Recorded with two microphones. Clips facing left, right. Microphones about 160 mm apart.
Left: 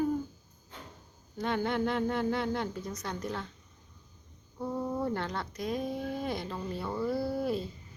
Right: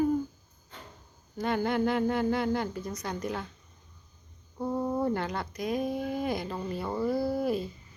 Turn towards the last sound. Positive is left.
turn(degrees=-10)  # may be behind; listen again after turning